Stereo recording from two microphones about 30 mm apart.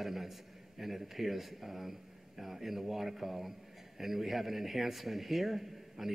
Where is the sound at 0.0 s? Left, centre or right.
Centre.